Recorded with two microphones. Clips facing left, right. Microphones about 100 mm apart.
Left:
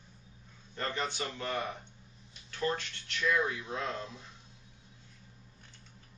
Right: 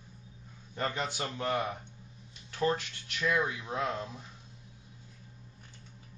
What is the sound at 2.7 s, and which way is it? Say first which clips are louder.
Speech: right 1 dB; 15° right (ahead or behind).